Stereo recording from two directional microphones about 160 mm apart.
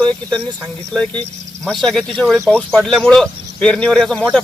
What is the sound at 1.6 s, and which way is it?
Speech, centre (ahead or behind).